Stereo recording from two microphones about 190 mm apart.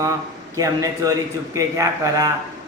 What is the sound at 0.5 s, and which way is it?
A man's voice, 15° right (ahead or behind).